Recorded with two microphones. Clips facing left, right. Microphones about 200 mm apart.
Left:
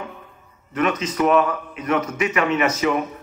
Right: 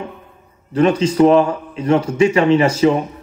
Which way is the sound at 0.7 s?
30° right (ahead or behind).